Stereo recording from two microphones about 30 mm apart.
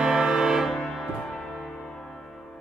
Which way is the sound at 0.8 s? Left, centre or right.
Left.